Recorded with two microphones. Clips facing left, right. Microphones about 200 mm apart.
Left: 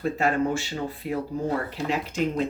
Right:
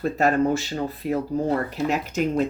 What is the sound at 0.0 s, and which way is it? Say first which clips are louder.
Speech: right 3 dB; 40° right (ahead or behind).